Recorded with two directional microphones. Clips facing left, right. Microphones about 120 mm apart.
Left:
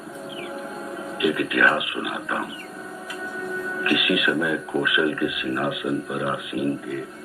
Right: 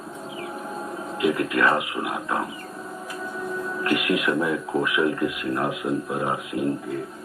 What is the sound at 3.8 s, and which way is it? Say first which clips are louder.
Speech: left 1 dB; 35° right (ahead or behind).